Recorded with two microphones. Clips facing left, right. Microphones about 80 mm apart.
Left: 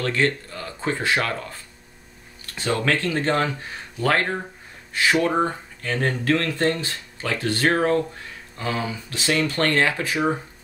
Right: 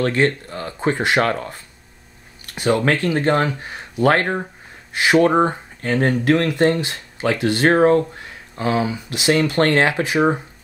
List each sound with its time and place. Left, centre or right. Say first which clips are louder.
0.0 s speech: right 4 dB; right
0.7 s speech: right 5 dB; right
2.5 s speech: right 5 dB; centre